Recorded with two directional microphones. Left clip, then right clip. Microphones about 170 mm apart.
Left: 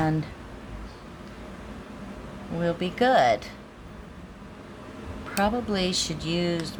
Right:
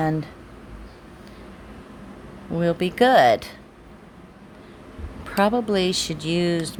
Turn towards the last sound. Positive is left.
turn(degrees=-50)  # may be behind; listen again after turning